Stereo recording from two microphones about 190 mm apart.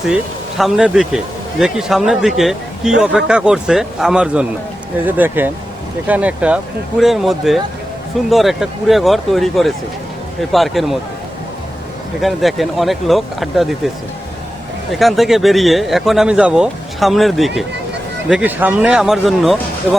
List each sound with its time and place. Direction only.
0.6 s speech: centre (ahead or behind)
12.2 s speech: centre (ahead or behind)
14.9 s speech: centre (ahead or behind)